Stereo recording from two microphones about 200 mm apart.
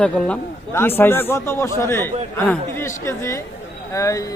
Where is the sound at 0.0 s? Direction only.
10° left (ahead or behind).